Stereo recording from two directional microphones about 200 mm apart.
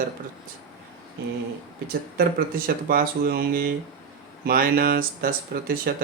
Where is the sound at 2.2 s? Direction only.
50° right (ahead or behind).